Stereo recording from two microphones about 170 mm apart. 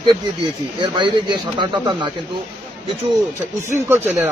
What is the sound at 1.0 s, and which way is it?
A man's voice, 25° right (ahead or behind).